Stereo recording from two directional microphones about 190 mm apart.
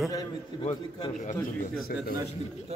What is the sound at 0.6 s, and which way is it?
Speech, 35° left (ahead or behind).